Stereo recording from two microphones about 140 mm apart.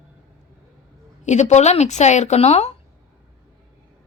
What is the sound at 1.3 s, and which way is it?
A woman's voice, 55° left (ahead or behind).